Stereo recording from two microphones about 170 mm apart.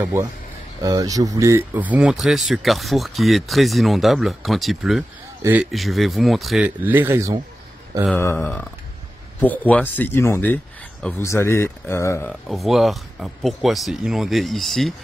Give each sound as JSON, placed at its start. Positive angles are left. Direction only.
{"t": 0.0, "sound": "speech", "side_deg": -20}
{"t": 6.8, "sound": "speech", "side_deg": -10}
{"t": 8.4, "sound": "speech", "side_deg": 10}
{"t": 12.3, "sound": "speech", "side_deg": 0}